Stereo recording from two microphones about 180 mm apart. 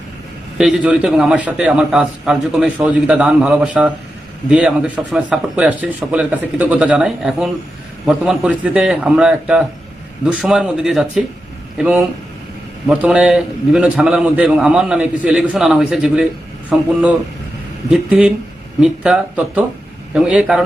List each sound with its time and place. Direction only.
0.6 s a man's voice: 5° right (ahead or behind)